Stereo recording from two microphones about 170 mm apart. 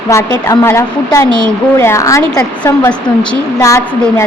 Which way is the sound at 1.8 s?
15° left (ahead or behind).